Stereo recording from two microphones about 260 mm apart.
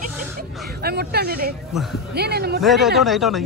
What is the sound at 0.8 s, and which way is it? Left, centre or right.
Speech, right.